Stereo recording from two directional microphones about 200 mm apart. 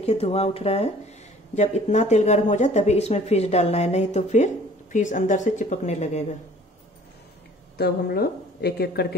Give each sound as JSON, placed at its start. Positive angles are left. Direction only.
{"t": 0.0, "sound": "speech", "side_deg": 30}
{"t": 7.7, "sound": "a woman's voice", "side_deg": 50}